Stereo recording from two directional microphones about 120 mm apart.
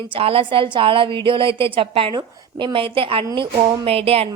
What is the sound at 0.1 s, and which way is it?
A woman's voice, 50° right (ahead or behind).